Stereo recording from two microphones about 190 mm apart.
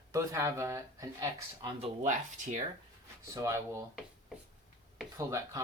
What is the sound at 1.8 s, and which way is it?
Speech, 40° right (ahead or behind).